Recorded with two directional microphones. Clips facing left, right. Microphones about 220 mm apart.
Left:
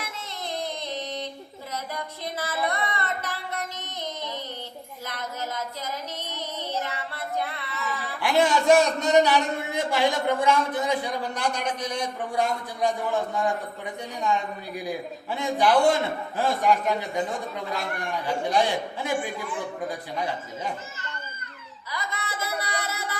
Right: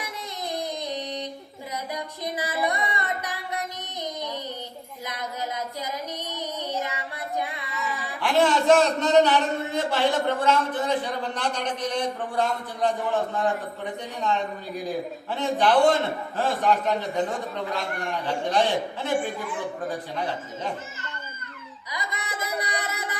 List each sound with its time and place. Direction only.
0.4 s a sound: 15° right (ahead or behind)
5.0 s music: 15° right (ahead or behind)
6.3 s child singing: 15° right (ahead or behind)
8.2 s a man's voice: 10° left (ahead or behind)
14.8 s a man's voice: 10° left (ahead or behind)
18.3 s a man's voice: 10° left (ahead or behind)
21.9 s music: 15° right (ahead or behind)